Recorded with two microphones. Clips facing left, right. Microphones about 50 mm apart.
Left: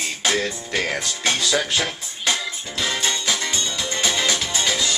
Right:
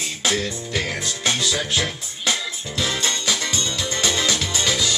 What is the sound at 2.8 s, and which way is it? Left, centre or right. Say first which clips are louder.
Music: left 1 dB; centre.